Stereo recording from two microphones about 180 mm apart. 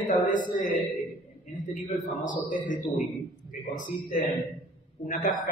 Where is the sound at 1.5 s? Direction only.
45° left (ahead or behind).